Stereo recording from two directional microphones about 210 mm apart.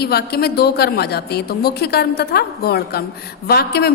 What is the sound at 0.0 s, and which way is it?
A woman's voice, 50° left (ahead or behind).